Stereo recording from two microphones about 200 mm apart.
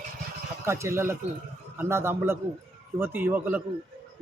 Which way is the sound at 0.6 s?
15° right (ahead or behind).